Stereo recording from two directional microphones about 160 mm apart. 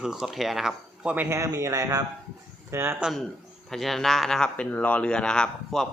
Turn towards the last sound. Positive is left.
turn(degrees=5)  # may be behind; listen again after turning